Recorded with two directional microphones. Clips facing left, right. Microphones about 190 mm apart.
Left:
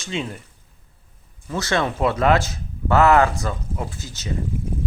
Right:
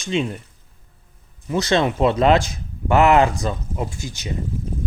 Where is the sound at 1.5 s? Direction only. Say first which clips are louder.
Right 4 dB; 20° right (ahead or behind).